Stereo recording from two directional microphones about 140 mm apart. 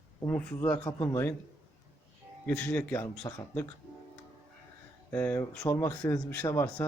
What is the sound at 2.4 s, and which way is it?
Speech, 10° left (ahead or behind).